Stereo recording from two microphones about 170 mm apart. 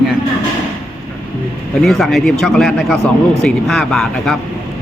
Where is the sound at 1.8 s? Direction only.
Centre (ahead or behind).